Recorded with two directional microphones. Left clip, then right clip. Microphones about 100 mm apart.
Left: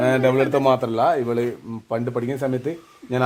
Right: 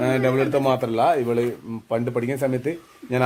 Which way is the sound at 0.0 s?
90° left.